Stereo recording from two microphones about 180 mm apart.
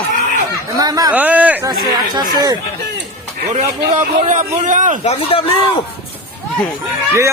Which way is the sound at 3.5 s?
40° right (ahead or behind).